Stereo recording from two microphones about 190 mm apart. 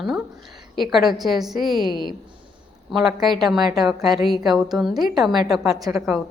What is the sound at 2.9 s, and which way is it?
A woman's voice, centre (ahead or behind).